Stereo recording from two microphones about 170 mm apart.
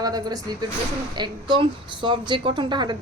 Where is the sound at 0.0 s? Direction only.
20° right (ahead or behind).